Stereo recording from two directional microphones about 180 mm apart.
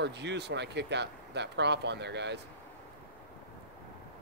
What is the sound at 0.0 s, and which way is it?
Speech, 70° right (ahead or behind).